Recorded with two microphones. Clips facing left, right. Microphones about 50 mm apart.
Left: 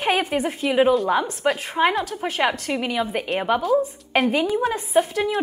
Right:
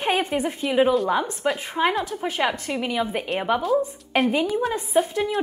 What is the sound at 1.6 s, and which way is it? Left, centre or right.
A woman's voice, left.